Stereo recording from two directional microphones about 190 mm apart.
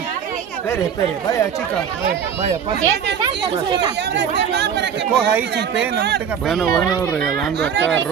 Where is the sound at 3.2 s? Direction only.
25° right (ahead or behind).